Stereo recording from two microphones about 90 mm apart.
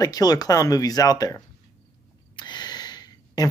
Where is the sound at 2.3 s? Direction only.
55° left (ahead or behind).